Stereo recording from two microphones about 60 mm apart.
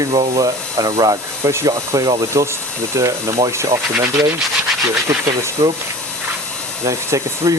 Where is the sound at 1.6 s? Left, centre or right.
Right.